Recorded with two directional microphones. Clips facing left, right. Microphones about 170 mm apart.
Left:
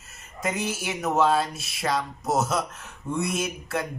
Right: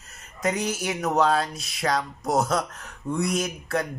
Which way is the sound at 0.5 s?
25° left (ahead or behind).